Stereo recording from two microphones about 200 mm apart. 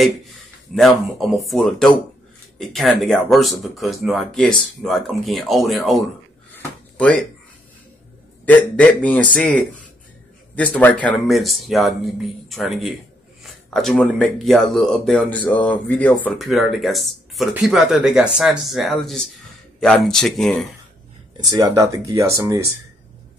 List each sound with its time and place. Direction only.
0.7 s speech: centre (ahead or behind)
6.5 s a sound: 5° left (ahead or behind)
8.5 s a man's voice: 5° left (ahead or behind)
21.5 s speech: 15° right (ahead or behind)